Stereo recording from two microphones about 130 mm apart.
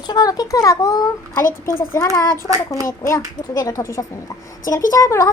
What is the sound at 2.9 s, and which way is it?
Speech, 25° left (ahead or behind).